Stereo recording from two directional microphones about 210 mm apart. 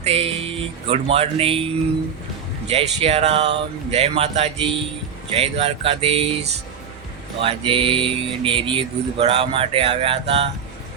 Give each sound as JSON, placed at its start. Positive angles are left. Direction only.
{"t": 0.0, "sound": "speech", "side_deg": -30}
{"t": 7.4, "sound": "speech", "side_deg": -25}